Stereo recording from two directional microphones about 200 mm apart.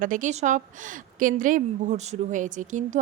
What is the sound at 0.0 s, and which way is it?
A woman's voice, 40° right (ahead or behind).